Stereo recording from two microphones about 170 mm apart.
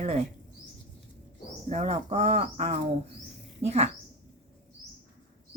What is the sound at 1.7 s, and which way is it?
Speech, 40° right (ahead or behind).